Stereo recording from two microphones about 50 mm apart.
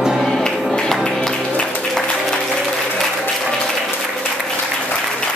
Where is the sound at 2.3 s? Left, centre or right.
Centre.